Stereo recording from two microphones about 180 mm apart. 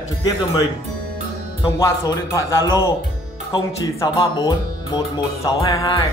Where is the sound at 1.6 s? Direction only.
20° left (ahead or behind).